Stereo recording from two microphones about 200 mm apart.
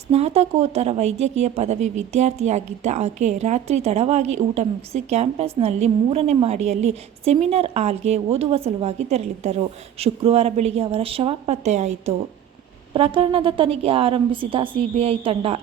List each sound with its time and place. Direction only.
0.1 s a woman's voice: 30° right (ahead or behind)